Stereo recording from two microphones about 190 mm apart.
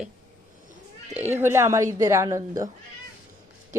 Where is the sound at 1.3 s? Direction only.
10° right (ahead or behind).